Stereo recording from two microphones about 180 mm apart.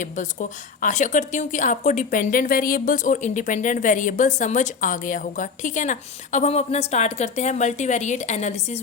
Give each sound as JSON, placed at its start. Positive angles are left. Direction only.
{"t": 0.0, "sound": "a woman's voice", "side_deg": 45}